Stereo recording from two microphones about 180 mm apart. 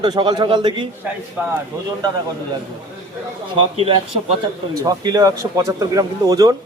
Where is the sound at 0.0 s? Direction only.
25° right (ahead or behind).